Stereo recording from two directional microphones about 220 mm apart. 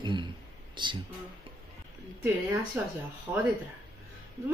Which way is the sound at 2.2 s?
10° right (ahead or behind).